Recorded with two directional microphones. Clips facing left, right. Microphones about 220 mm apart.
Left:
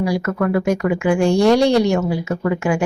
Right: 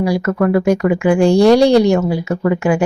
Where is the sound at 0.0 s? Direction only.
35° right (ahead or behind).